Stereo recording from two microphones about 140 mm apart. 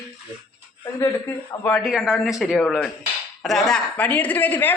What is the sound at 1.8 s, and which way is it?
A woman's voice, centre (ahead or behind).